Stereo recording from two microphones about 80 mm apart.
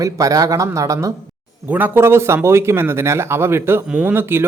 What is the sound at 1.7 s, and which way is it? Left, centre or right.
Speech, right.